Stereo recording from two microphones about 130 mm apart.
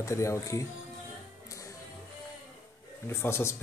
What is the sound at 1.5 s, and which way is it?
Music, 25° left (ahead or behind).